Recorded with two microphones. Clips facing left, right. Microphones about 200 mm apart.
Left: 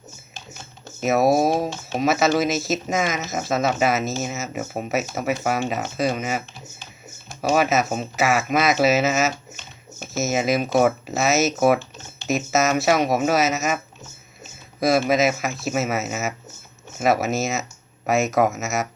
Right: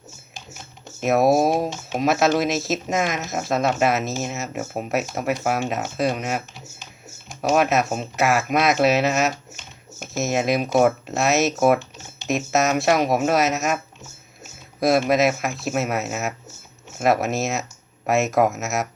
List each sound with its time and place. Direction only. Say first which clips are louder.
1.0 s speech: right 1 dB; centre (ahead or behind)
7.5 s speech: even; centre (ahead or behind)
11.8 s typing: even; 15° right (ahead or behind)
12.3 s speech: even; centre (ahead or behind)
14.8 s speech: right 1 dB; centre (ahead or behind)